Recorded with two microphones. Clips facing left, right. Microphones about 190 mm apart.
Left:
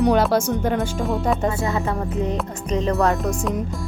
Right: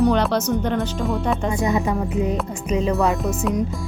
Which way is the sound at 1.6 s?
15° right (ahead or behind).